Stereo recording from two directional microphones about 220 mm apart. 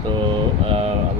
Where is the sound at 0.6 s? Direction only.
25° right (ahead or behind).